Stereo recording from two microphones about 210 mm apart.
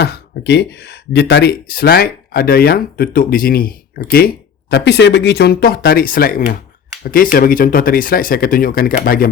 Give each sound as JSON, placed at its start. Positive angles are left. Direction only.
{"t": 0.0, "sound": "speech", "side_deg": 50}